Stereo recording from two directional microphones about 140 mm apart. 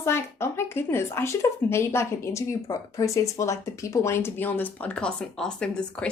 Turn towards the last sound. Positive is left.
turn(degrees=5)  # may be behind; listen again after turning